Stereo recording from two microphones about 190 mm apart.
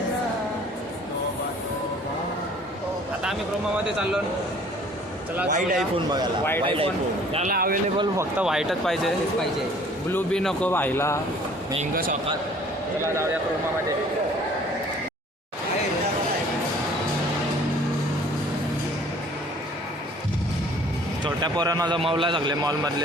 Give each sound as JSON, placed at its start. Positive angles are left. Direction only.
{"t": 5.5, "sound": "a man's voice", "side_deg": -45}
{"t": 6.7, "sound": "a man's voice", "side_deg": -30}
{"t": 7.5, "sound": "a man's voice", "side_deg": -50}
{"t": 8.1, "sound": "speech", "side_deg": -15}
{"t": 8.4, "sound": "speech", "side_deg": 0}
{"t": 11.8, "sound": "a man's voice", "side_deg": -50}
{"t": 21.2, "sound": "a man's voice", "side_deg": -20}